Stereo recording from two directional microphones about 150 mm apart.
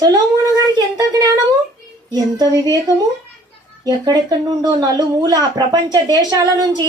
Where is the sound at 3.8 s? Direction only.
25° right (ahead or behind).